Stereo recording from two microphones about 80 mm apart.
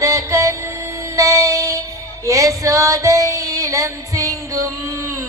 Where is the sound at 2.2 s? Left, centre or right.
Right.